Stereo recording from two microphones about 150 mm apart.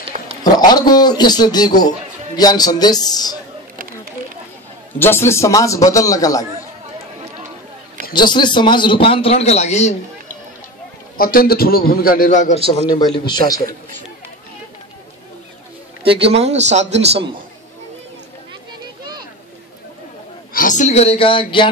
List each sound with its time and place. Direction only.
0.4 s a man's voice: 25° left (ahead or behind)
4.9 s a man's voice: 15° left (ahead or behind)
8.1 s a man's voice: 30° left (ahead or behind); by 10.3 s 50° left (ahead or behind)
11.1 s a man's voice: 75° left (ahead or behind); by 12.5 s 55° left (ahead or behind)
12.8 s a man's voice: 30° left (ahead or behind)
16.0 s a man's voice: 40° right (ahead or behind)
20.5 s speech: 60° left (ahead or behind); by 21.6 s 35° left (ahead or behind)